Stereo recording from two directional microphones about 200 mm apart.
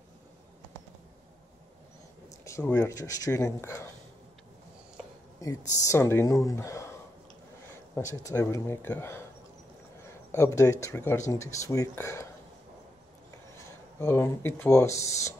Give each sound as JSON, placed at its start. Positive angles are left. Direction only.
{"t": 2.2, "sound": "speech", "side_deg": 15}
{"t": 5.4, "sound": "a sound", "side_deg": 15}
{"t": 5.9, "sound": "speech", "side_deg": 15}
{"t": 8.1, "sound": "speech", "side_deg": 15}
{"t": 10.3, "sound": "speech", "side_deg": 15}
{"t": 13.9, "sound": "speech", "side_deg": 15}